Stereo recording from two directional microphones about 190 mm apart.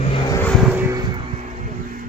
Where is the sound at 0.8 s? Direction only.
20° right (ahead or behind).